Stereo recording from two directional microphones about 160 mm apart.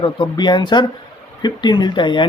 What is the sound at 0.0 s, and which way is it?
Speech, 30° left (ahead or behind).